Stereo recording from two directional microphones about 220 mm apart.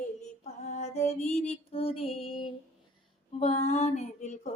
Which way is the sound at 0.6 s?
30° left (ahead or behind).